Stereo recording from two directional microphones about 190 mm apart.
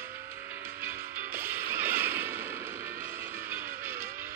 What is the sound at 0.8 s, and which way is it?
Music, 10° right (ahead or behind).